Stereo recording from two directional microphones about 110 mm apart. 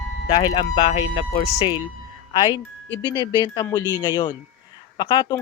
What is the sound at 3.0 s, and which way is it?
Speech, 45° left (ahead or behind).